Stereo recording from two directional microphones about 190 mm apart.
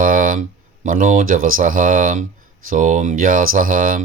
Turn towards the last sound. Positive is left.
turn(degrees=-45)  # may be behind; listen again after turning